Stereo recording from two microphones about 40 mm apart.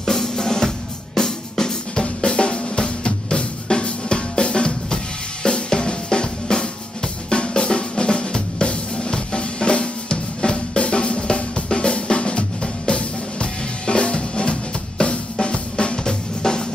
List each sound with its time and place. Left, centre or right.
0.0 s drum: centre
3.6 s drum kit: left
7.2 s drum: left